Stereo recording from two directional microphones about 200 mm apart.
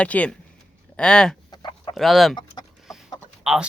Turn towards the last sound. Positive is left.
turn(degrees=-5)  # may be behind; listen again after turning